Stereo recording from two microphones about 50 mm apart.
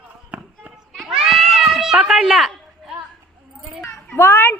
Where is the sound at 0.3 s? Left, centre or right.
Right.